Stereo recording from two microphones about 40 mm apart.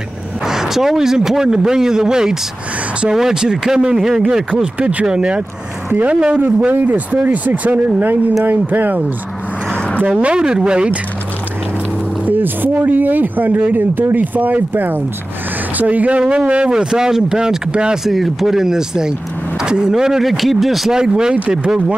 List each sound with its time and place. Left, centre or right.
0.5 s speech: centre
4.7 s speech: right
5.0 s speech: right
6.7 s speech: right
10.0 s speech: right
12.3 s speech: right
15.8 s speech: right
16.2 s speech: right
18.0 s speech: centre
19.6 s vehicle: right
19.9 s a man's voice: centre
20.9 s speech: centre